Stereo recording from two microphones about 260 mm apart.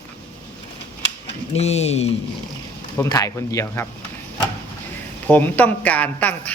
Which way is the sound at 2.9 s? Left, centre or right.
Centre.